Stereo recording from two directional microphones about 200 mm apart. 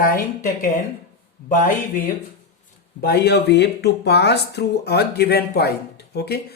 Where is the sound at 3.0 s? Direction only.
50° left (ahead or behind).